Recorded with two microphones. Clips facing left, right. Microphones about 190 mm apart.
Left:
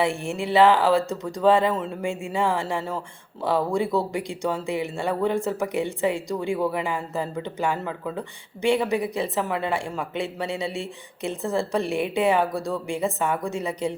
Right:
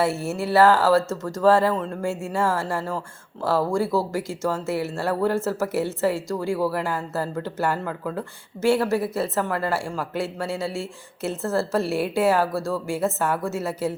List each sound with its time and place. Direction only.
0.0 s speech: 5° right (ahead or behind)